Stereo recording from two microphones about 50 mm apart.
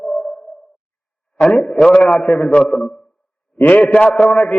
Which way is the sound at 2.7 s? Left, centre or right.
Centre.